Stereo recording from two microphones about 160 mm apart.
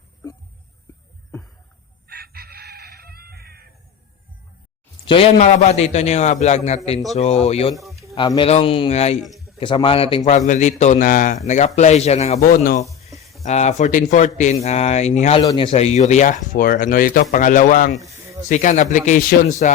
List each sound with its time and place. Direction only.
2.0 s chicken: 75° right (ahead or behind)
5.0 s speech: 35° left (ahead or behind)
5.4 s speech: 45° left (ahead or behind)
7.7 s speech: centre (ahead or behind)
8.4 s speech: 40° left (ahead or behind)
9.2 s a sound: centre (ahead or behind)
9.6 s speech: 30° left (ahead or behind)
10.2 s speech: 50° left (ahead or behind)
12.4 s speech: 65° left (ahead or behind)
13.4 s speech: 45° left (ahead or behind)
15.4 s speech: 30° left (ahead or behind); by 19.5 s 65° left (ahead or behind)